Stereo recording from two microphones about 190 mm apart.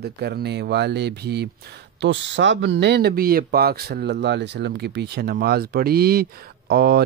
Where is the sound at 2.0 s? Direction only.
70° right (ahead or behind).